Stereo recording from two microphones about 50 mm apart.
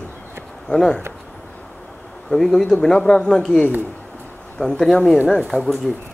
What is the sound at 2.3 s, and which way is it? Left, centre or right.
Speech, centre.